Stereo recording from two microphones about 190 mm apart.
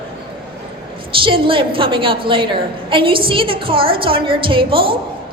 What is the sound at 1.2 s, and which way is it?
A woman's voice, 25° right (ahead or behind).